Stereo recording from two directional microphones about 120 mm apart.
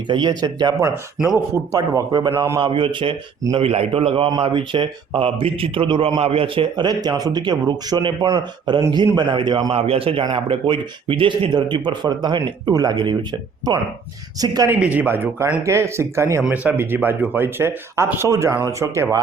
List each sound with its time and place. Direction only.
0.1 s speech: 40° right (ahead or behind); by 2.6 s 25° right (ahead or behind)
2.6 s speech: 45° right (ahead or behind)
9.7 s speech: 55° right (ahead or behind); by 13.1 s 35° right (ahead or behind)
14.3 s speech: 30° right (ahead or behind)
14.7 s speech: 10° right (ahead or behind)